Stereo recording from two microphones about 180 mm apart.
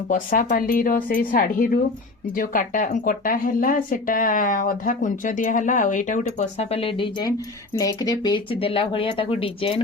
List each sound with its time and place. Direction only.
0.1 s speech: 50° left (ahead or behind); by 9.8 s 30° left (ahead or behind)